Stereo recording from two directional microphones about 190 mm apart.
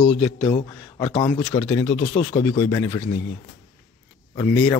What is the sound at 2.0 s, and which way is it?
Speech, 35° left (ahead or behind).